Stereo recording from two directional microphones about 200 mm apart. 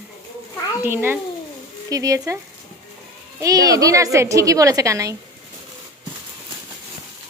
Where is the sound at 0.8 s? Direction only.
10° right (ahead or behind).